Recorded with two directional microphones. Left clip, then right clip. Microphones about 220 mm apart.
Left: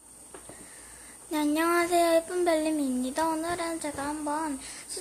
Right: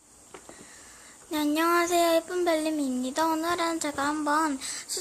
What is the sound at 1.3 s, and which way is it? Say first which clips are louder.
Child singing: right 1 dB; 5° right (ahead or behind).